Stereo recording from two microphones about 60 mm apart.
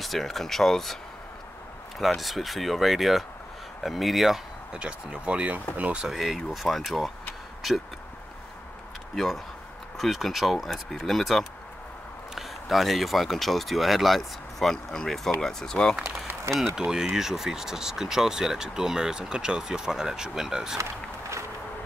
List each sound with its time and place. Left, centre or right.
0.0 s speech: centre
2.0 s speech: centre
4.7 s speech: centre
6.0 s speech: centre
9.1 s speech: centre
16.0 s speech: right
16.7 s speech: centre